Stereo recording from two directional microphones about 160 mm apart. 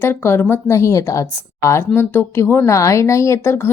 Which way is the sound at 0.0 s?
15° left (ahead or behind).